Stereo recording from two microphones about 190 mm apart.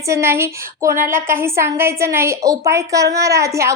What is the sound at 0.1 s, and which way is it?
Speech, 15° right (ahead or behind).